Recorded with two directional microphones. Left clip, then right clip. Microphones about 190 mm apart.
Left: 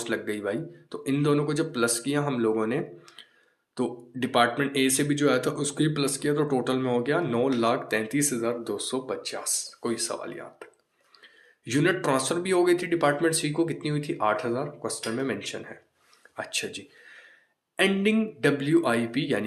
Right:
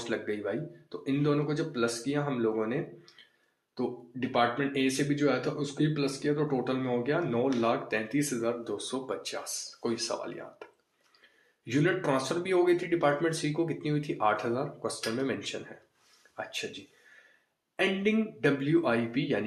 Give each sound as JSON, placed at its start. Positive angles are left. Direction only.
{"t": 0.0, "sound": "speech", "side_deg": 25}
{"t": 11.6, "sound": "speech", "side_deg": 25}
{"t": 17.7, "sound": "speech", "side_deg": 20}